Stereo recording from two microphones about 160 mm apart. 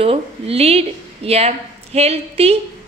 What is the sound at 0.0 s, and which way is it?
A woman's voice, 35° right (ahead or behind).